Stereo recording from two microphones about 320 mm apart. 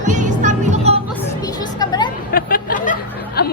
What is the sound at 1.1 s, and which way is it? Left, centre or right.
Speech, centre.